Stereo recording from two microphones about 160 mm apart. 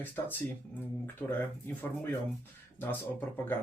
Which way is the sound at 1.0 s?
10° left (ahead or behind).